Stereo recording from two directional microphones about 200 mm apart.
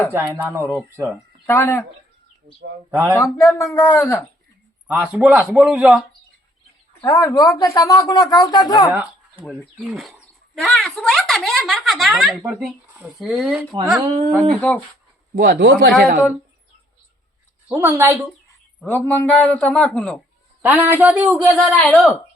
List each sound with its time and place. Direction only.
0.1 s speech: 15° right (ahead or behind)
1.5 s a woman's voice: 10° left (ahead or behind)
2.5 s speech: 50° right (ahead or behind)
2.9 s speech: 5° right (ahead or behind)
3.2 s a woman's voice: 15° left (ahead or behind)
5.1 s speech: 5° right (ahead or behind)
7.0 s a woman's voice: 15° left (ahead or behind)
8.9 s a sound: 10° right (ahead or behind)
9.7 s speech: centre (ahead or behind)
15.4 s a man's voice: 60° right (ahead or behind)
17.7 s speech: 15° right (ahead or behind)
18.8 s a woman's voice: 10° left (ahead or behind)
20.6 s speech: 10° right (ahead or behind)